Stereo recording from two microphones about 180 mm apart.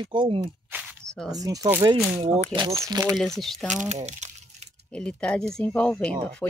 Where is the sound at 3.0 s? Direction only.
Centre (ahead or behind).